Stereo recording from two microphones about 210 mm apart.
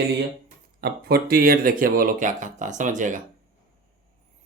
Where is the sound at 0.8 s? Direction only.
50° right (ahead or behind).